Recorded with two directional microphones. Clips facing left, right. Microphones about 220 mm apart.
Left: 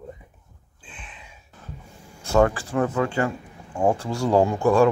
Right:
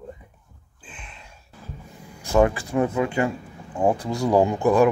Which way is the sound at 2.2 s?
15° right (ahead or behind).